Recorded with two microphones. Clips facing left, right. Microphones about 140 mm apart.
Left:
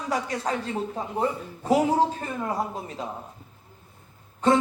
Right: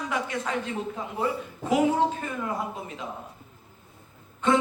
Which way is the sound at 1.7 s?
35° left (ahead or behind).